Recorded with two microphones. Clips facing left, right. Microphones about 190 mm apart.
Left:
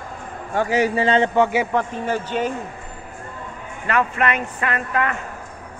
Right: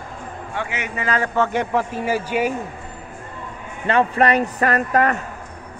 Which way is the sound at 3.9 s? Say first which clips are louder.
Right 4 dB; 30° right (ahead or behind).